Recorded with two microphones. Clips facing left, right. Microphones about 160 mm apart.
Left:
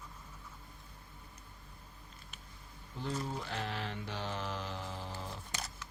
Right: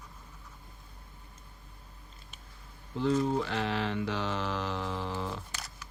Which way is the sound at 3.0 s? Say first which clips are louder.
Right 11 dB; 90° right.